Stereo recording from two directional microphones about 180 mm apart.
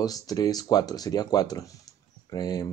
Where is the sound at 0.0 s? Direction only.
20° left (ahead or behind).